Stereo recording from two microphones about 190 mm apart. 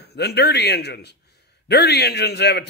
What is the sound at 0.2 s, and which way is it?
Speech, 60° left (ahead or behind).